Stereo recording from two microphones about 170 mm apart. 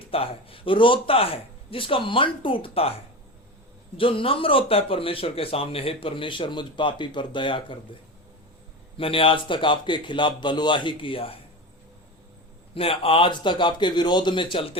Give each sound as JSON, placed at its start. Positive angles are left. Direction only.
{"t": 0.1, "sound": "speech", "side_deg": 35}
{"t": 3.9, "sound": "speech", "side_deg": 30}
{"t": 9.0, "sound": "a man's voice", "side_deg": 30}
{"t": 12.7, "sound": "a man's voice", "side_deg": 35}